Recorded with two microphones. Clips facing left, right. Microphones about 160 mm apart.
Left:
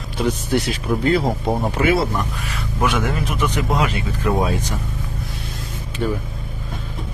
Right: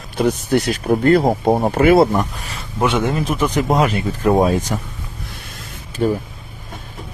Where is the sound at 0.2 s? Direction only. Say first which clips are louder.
Right 4 dB; 50° right (ahead or behind).